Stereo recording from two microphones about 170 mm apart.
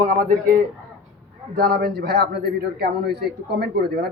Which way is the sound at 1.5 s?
65° right (ahead or behind).